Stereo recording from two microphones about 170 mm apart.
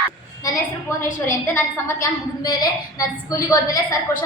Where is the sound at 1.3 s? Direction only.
15° left (ahead or behind).